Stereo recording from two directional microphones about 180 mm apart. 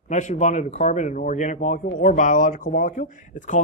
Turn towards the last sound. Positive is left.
turn(degrees=45)  # may be behind; listen again after turning